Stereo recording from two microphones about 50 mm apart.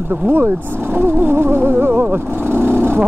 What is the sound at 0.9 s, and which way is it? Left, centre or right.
Speech, right.